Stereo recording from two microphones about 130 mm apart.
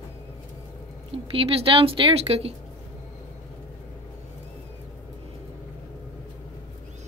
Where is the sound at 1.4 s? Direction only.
45° right (ahead or behind).